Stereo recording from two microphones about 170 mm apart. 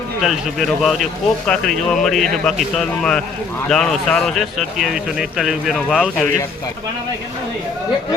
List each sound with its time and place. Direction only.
0.2 s speech: centre (ahead or behind)